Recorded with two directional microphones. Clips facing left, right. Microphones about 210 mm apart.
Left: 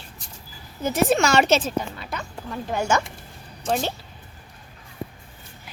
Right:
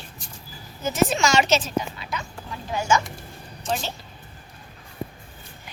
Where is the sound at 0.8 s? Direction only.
60° left (ahead or behind).